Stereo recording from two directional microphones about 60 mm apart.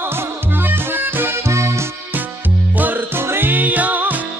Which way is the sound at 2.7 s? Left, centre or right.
Right.